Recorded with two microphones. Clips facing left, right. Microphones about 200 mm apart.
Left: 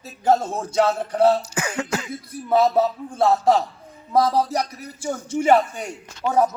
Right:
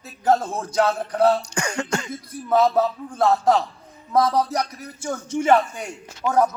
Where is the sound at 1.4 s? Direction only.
5° left (ahead or behind).